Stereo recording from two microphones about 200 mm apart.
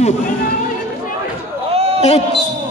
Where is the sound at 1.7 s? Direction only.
30° right (ahead or behind).